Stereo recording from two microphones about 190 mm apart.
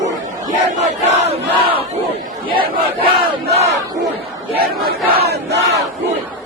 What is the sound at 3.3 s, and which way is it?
Crowd, 35° right (ahead or behind).